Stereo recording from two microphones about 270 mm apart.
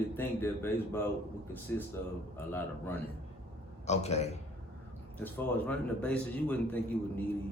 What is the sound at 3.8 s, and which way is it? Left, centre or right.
Speech, left.